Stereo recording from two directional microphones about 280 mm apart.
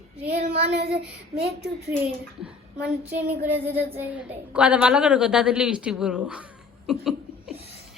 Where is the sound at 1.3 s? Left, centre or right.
Centre.